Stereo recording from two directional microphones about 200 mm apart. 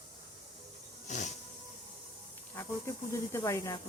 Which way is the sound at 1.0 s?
35° left (ahead or behind).